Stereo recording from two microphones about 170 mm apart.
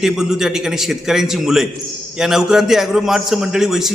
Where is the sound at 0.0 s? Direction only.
5° right (ahead or behind).